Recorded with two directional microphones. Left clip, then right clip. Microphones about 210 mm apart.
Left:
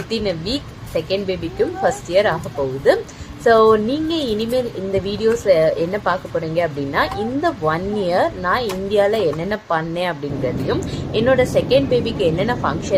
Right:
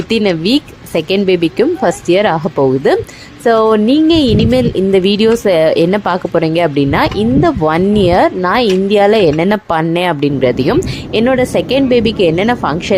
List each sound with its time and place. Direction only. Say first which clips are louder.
0.1 s speech: right 10 dB; 45° right (ahead or behind)